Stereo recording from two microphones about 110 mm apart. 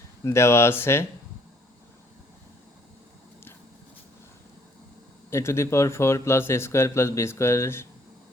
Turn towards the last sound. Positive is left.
turn(degrees=25)  # may be behind; listen again after turning